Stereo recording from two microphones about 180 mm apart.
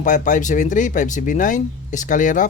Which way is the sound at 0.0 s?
45° left (ahead or behind).